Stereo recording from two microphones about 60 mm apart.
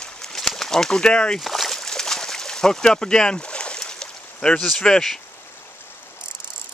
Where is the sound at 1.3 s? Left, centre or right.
Centre.